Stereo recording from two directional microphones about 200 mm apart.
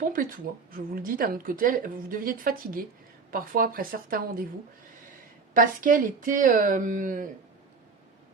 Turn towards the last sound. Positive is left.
turn(degrees=-40)  # may be behind; listen again after turning